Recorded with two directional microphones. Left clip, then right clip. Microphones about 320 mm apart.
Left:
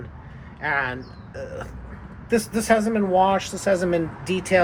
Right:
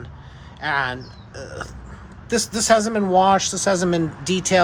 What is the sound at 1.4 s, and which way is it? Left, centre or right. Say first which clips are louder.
Speech: even; centre.